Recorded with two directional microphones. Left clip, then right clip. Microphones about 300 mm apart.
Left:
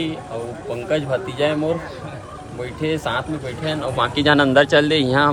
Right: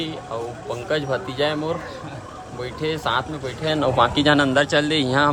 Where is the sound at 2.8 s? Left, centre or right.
Centre.